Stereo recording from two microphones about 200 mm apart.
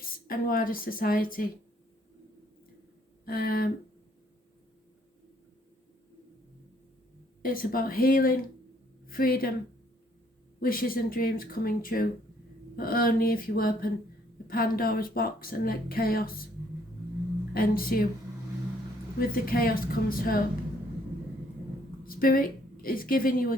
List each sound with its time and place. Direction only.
0.3 s speech: 45° left (ahead or behind)
3.2 s speech: 45° left (ahead or behind)
7.4 s speech: 45° left (ahead or behind)
10.6 s speech: 45° left (ahead or behind)
17.5 s speech: 50° left (ahead or behind)
19.2 s speech: 45° left (ahead or behind)
22.0 s a woman's voice: 45° left (ahead or behind)